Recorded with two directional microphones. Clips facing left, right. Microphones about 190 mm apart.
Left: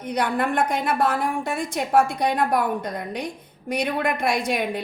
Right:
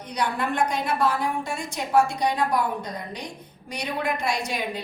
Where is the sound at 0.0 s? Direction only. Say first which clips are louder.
Left 4 dB; 55° left (ahead or behind).